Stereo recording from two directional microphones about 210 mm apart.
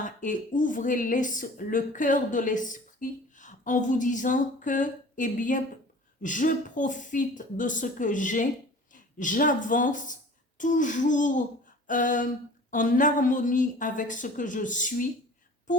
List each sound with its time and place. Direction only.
0.0 s speech: 40° left (ahead or behind)